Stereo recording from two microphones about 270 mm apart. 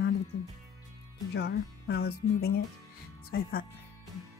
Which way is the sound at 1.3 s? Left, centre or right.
Left.